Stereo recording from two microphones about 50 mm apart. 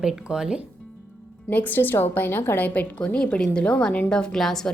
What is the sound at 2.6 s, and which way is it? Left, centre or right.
Speech, left.